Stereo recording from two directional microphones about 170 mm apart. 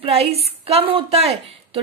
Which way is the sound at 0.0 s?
35° right (ahead or behind).